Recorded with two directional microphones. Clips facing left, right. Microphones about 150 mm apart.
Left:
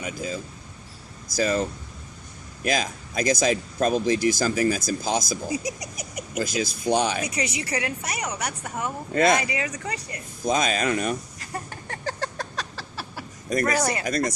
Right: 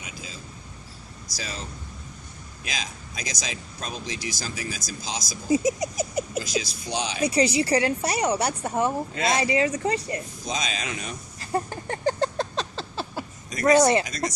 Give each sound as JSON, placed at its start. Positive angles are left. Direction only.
{"t": 0.0, "sound": "speech", "side_deg": 50}
{"t": 1.4, "sound": "speech", "side_deg": 55}
{"t": 2.6, "sound": "speech", "side_deg": 50}
{"t": 5.5, "sound": "a sound", "side_deg": -25}
{"t": 6.4, "sound": "speech", "side_deg": 50}
{"t": 7.2, "sound": "a woman's voice", "side_deg": -30}
{"t": 9.1, "sound": "speech", "side_deg": 50}
{"t": 9.4, "sound": "a sound", "side_deg": -30}
{"t": 10.4, "sound": "speech", "side_deg": 55}
{"t": 11.3, "sound": "a sound", "side_deg": -30}
{"t": 14.0, "sound": "speech", "side_deg": 55}